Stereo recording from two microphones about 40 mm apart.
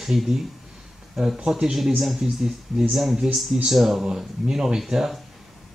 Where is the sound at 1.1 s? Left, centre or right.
Centre.